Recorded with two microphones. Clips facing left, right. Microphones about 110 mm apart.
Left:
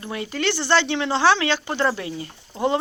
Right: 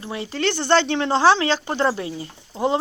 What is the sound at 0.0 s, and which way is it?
Speech, 25° right (ahead or behind).